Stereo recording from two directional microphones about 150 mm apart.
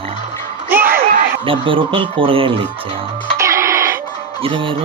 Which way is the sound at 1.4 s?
35° right (ahead or behind).